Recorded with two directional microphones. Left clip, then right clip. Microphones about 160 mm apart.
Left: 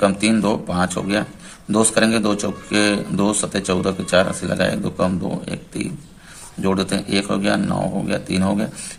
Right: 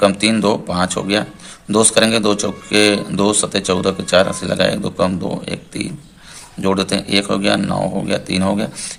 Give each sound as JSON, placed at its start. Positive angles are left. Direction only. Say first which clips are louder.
{"t": 0.0, "sound": "a man's voice", "louder": "right 4 dB", "side_deg": -15}